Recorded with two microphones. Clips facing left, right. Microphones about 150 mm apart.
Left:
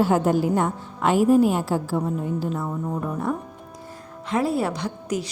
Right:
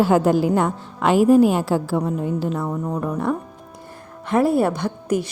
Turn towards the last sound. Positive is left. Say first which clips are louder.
# right 5 dB
turn(degrees=-55)  # may be behind; listen again after turning